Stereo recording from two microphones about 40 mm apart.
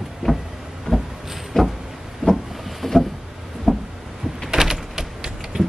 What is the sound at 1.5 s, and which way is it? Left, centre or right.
Vehicle, centre.